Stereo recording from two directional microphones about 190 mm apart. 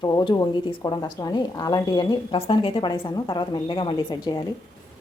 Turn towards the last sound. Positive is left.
turn(degrees=20)  # may be behind; listen again after turning